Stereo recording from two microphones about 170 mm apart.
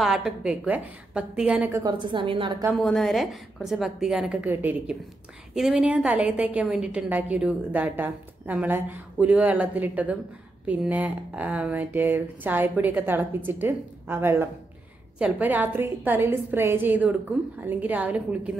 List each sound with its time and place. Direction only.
0.0 s a woman's voice: 5° right (ahead or behind)
1.7 s a woman's voice: 20° right (ahead or behind)
2.8 s a woman's voice: centre (ahead or behind)